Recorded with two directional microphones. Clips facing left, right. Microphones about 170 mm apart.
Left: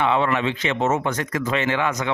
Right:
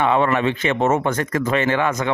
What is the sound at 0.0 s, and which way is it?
Speech, 50° right (ahead or behind).